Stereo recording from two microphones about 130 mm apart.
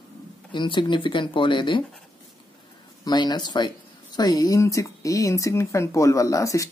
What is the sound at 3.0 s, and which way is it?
Speech, 35° left (ahead or behind).